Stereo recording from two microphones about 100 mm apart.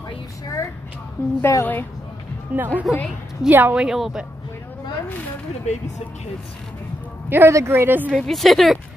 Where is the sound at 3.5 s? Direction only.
15° right (ahead or behind).